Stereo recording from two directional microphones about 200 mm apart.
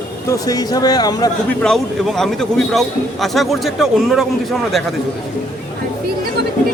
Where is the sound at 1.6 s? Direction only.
Centre (ahead or behind).